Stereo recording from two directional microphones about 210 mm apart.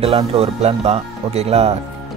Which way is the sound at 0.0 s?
25° right (ahead or behind).